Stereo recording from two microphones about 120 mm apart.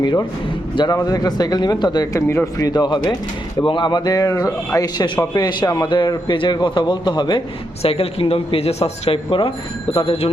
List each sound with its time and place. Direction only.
0.0 s a man's voice: 35° left (ahead or behind)
2.1 s a man's voice: 25° left (ahead or behind); by 7.4 s 40° left (ahead or behind)
7.8 s speech: 55° left (ahead or behind)